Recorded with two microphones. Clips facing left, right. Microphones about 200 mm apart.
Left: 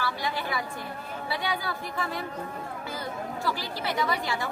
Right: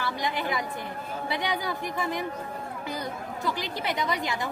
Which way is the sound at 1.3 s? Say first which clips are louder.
Right 1 dB; 20° right (ahead or behind).